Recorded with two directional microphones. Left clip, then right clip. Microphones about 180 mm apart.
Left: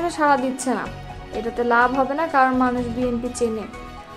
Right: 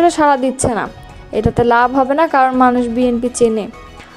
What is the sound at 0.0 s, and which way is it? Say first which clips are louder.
A woman's voice: right 7 dB; 40° right (ahead or behind).